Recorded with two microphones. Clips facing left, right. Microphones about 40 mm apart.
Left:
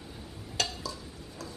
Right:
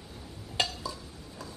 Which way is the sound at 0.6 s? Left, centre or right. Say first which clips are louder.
Right 2 dB; right.